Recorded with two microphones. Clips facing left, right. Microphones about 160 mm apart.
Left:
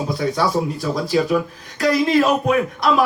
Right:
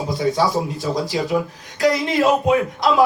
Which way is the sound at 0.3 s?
20° right (ahead or behind).